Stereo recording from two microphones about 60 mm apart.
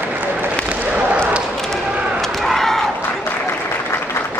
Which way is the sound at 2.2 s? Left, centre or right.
Centre.